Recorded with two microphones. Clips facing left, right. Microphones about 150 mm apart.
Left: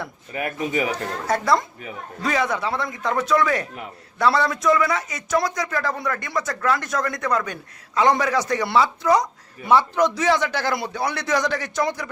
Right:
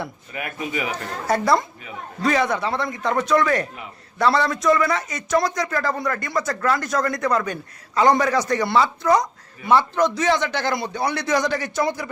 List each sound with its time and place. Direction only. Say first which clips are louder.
0.3 s speech: left 4 dB; 35° left (ahead or behind)
1.3 s a man's voice: right 2 dB; centre (ahead or behind)